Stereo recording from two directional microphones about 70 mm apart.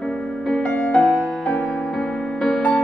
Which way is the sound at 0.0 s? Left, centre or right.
Centre.